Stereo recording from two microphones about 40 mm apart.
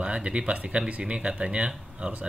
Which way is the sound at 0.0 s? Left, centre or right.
Right.